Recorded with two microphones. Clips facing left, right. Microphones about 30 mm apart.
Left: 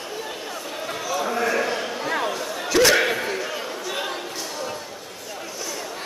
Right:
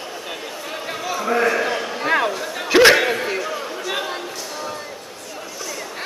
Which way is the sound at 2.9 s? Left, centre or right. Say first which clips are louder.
Right 2 dB; centre.